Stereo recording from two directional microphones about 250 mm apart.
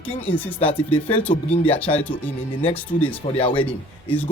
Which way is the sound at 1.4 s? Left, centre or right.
Left.